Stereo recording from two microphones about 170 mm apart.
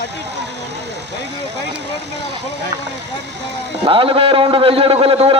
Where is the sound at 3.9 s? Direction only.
30° right (ahead or behind).